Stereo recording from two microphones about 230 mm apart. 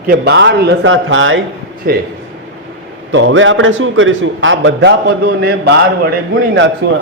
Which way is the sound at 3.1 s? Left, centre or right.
Right.